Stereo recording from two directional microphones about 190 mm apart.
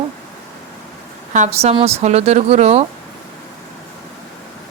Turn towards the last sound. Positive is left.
turn(degrees=-35)  # may be behind; listen again after turning